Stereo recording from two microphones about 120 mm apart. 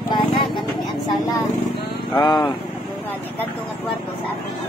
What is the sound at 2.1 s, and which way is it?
Speech, 35° left (ahead or behind).